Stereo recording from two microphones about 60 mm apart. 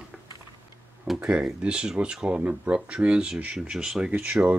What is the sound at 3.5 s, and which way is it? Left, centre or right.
Speech, centre.